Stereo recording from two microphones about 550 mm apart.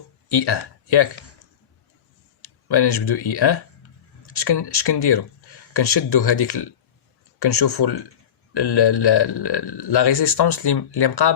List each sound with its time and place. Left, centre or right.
0.3 s speech: left
2.4 s a man's voice: left